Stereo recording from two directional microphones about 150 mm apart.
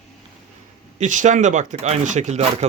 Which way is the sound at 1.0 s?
55° right (ahead or behind).